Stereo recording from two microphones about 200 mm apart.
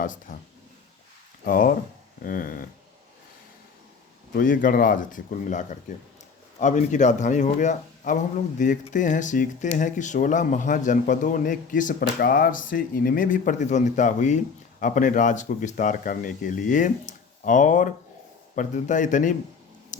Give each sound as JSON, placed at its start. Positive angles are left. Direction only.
{"t": 0.0, "sound": "a man's voice", "side_deg": 40}
{"t": 1.5, "sound": "speech", "side_deg": 45}
{"t": 4.4, "sound": "a man's voice", "side_deg": 40}
{"t": 19.9, "sound": "a sound", "side_deg": 40}